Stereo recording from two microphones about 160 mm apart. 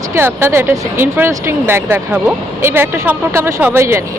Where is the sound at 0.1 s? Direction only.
15° right (ahead or behind).